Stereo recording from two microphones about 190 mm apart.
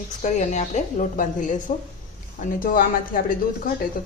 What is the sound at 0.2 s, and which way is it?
A woman's voice, 40° left (ahead or behind).